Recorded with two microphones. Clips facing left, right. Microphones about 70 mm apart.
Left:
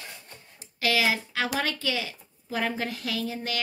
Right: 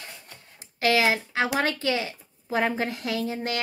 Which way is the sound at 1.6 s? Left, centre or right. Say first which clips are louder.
Right 4 dB; right.